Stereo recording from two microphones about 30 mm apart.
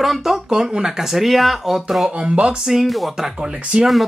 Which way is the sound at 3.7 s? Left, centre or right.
Right.